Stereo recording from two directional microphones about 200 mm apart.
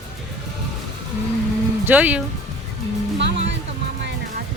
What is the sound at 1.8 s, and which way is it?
Speech, 10° right (ahead or behind).